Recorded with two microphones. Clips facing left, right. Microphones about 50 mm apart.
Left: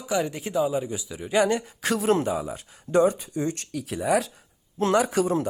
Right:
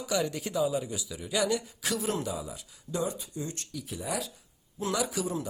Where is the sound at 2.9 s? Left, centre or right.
Left.